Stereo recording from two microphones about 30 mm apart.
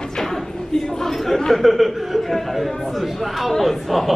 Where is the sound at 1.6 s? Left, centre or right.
Centre.